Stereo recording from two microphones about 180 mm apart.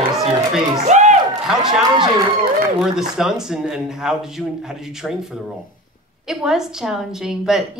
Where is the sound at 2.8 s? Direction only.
5° right (ahead or behind).